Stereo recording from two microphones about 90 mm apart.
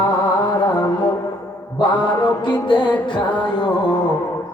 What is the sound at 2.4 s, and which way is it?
Speech, 65° left (ahead or behind).